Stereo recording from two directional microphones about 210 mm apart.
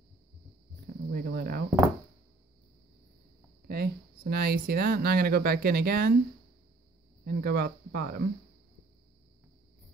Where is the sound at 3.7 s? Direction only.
45° right (ahead or behind).